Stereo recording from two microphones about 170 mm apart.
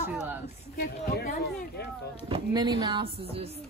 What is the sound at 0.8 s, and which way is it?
Speech, 60° left (ahead or behind).